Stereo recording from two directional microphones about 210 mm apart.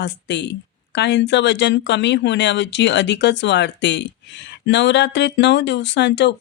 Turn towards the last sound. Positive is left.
turn(degrees=55)  # may be behind; listen again after turning